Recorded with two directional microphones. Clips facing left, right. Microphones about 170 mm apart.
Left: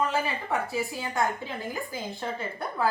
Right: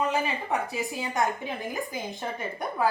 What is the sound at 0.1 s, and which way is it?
Speech, 20° right (ahead or behind).